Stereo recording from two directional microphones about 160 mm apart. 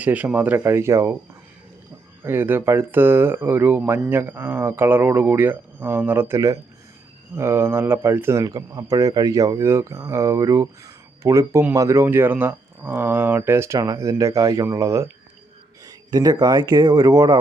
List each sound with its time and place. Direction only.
0.0 s speech: 10° right (ahead or behind)
2.2 s speech: 15° right (ahead or behind)